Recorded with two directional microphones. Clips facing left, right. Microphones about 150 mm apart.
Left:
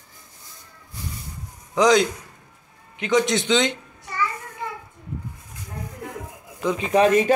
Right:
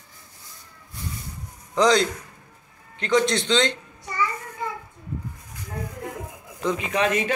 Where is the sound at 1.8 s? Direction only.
Centre (ahead or behind).